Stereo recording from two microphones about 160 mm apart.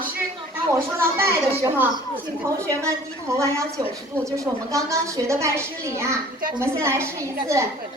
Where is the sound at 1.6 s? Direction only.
15° right (ahead or behind).